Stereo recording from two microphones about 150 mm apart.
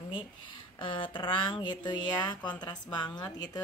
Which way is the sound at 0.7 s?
35° left (ahead or behind).